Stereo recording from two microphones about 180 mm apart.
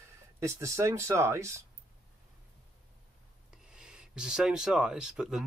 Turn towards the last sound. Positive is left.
turn(degrees=-5)  # may be behind; listen again after turning